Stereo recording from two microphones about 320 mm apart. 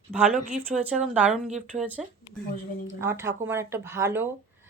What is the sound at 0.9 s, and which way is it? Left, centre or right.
Speech, centre.